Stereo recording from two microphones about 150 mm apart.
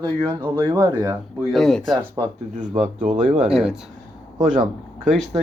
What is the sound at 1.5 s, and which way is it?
Speech, 5° left (ahead or behind).